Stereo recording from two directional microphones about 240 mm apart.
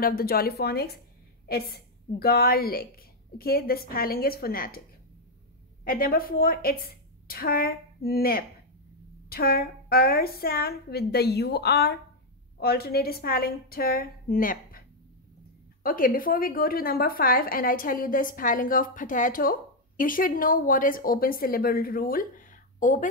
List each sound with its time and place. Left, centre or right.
0.0 s a woman's voice: left
5.9 s a woman's voice: left